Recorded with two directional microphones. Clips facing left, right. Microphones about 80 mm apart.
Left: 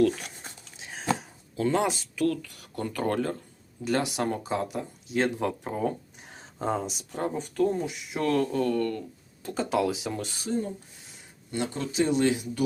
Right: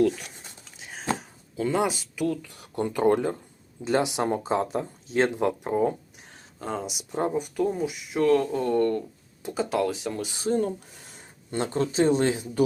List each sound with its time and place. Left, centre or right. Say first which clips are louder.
0.8 s speech: left 1 dB; centre
6.3 s a sound: left 4 dB; centre
6.7 s speech: left 1 dB; centre
7.1 s speech: right 5 dB; centre
8.5 s speech: right 3 dB; right
9.4 s speech: right 2 dB; centre
9.6 s speech: left 1 dB; centre
11.5 s speech: right 3 dB; right